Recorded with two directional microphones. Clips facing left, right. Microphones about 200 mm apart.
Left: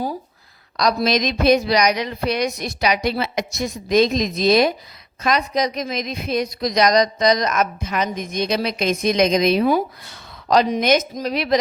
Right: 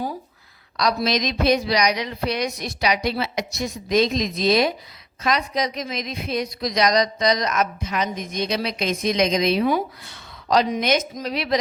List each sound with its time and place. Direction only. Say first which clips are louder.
0.8 s a woman's voice: left 3 dB; 45° left (ahead or behind)